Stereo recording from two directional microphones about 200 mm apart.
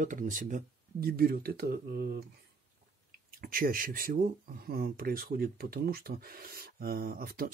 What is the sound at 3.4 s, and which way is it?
Speech, 45° right (ahead or behind).